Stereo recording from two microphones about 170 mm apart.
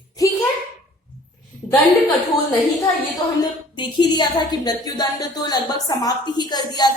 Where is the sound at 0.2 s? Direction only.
20° left (ahead or behind).